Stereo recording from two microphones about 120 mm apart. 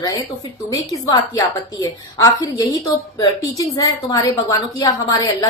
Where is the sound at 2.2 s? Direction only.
30° left (ahead or behind).